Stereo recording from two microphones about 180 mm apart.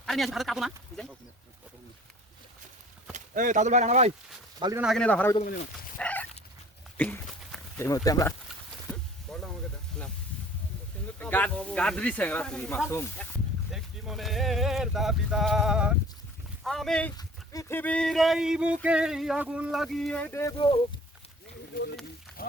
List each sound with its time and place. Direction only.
0.0 s speech: centre (ahead or behind)
3.1 s speech: 45° right (ahead or behind)
4.8 s speech: centre (ahead or behind)
6.0 s dog: 10° left (ahead or behind)
6.9 s a sound: 10° left (ahead or behind)
9.3 s a sound: 5° left (ahead or behind)
11.2 s speech: 10° left (ahead or behind)
13.7 s speech: centre (ahead or behind)
17.2 s speech: 20° left (ahead or behind); by 20.2 s 5° left (ahead or behind)
20.3 s speech: 15° left (ahead or behind)
21.7 s a sound: 55° left (ahead or behind)
22.3 s a sound: 5° left (ahead or behind)